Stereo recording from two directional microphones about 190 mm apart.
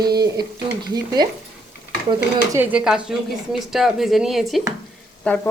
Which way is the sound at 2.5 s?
10° right (ahead or behind).